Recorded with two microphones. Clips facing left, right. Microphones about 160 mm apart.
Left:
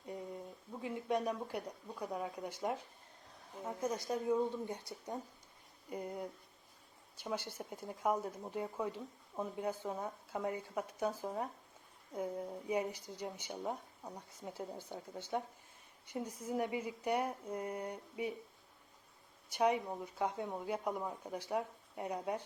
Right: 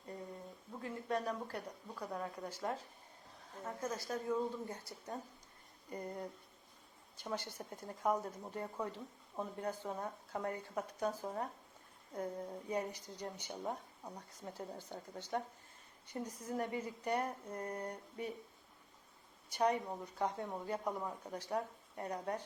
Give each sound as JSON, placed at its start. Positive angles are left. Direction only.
{"t": 0.7, "sound": "speech", "side_deg": 10}
{"t": 19.5, "sound": "speech", "side_deg": 10}